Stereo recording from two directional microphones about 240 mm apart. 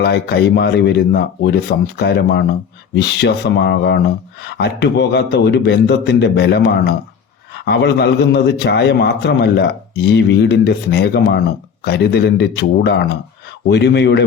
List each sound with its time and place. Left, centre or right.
0.0 s speech: left